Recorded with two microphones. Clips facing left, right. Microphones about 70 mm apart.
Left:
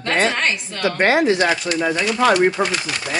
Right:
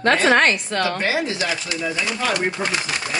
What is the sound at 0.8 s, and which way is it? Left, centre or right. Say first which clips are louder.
Speech: left 8 dB; left.